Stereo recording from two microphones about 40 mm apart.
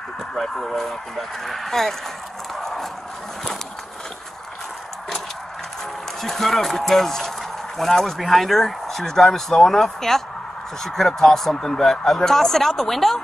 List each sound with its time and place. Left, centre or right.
0.3 s speech: centre
2.5 s horse: centre
6.2 s speech: centre